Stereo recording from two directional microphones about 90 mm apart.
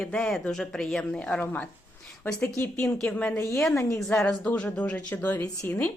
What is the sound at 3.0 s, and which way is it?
Speech, 10° left (ahead or behind).